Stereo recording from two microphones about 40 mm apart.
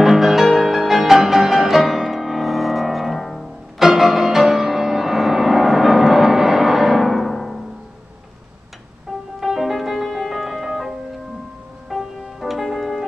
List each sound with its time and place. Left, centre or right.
0.0 s music: centre
9.4 s music: centre
11.9 s music: centre